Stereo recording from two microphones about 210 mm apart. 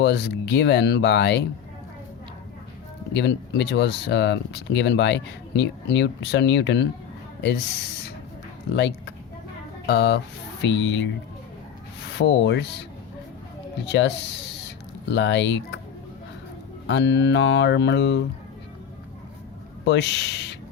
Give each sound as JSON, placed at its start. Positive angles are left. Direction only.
{"t": 0.0, "sound": "speech", "side_deg": 50}
{"t": 3.1, "sound": "speech", "side_deg": 55}
{"t": 8.7, "sound": "speech", "side_deg": 55}
{"t": 12.1, "sound": "speech", "side_deg": 55}
{"t": 13.8, "sound": "speech", "side_deg": 55}
{"t": 15.1, "sound": "speech", "side_deg": 55}
{"t": 16.8, "sound": "speech", "side_deg": 55}
{"t": 19.8, "sound": "speech", "side_deg": 55}